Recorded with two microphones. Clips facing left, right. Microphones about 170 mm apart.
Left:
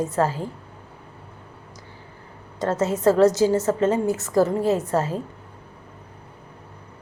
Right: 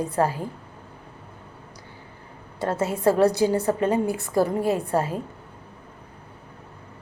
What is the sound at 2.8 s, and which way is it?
Speech, 15° right (ahead or behind).